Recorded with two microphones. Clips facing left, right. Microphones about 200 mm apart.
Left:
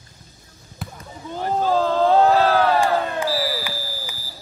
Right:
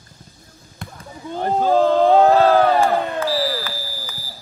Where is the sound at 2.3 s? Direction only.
55° right (ahead or behind).